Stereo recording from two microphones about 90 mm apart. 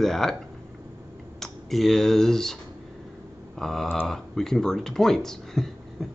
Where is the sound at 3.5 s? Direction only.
5° left (ahead or behind).